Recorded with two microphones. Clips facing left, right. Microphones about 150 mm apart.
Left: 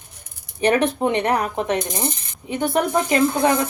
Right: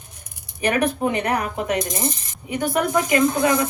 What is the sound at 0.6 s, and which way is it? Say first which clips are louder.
A woman's voice: left 2 dB; 30° left (ahead or behind).